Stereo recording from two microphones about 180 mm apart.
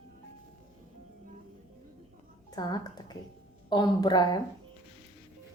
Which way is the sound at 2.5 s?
20° left (ahead or behind).